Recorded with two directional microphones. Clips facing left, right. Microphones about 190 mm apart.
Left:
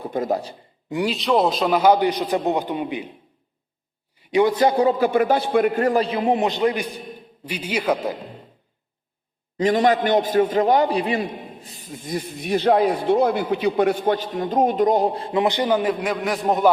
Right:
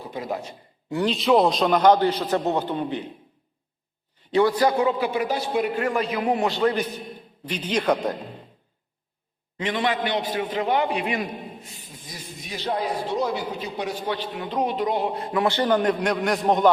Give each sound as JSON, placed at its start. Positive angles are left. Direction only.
{"t": 0.0, "sound": "speech", "side_deg": 50}
{"t": 0.9, "sound": "speech", "side_deg": 15}
{"t": 1.1, "sound": "a man's voice", "side_deg": 0}
{"t": 4.2, "sound": "a man's voice", "side_deg": 15}
{"t": 4.8, "sound": "a man's voice", "side_deg": 40}
{"t": 9.6, "sound": "a man's voice", "side_deg": 40}